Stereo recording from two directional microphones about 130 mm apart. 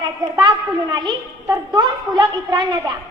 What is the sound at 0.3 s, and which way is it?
A child's voice, 35° right (ahead or behind).